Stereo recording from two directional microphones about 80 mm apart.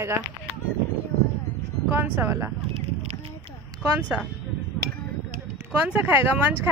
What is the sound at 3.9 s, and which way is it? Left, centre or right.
Speech, centre.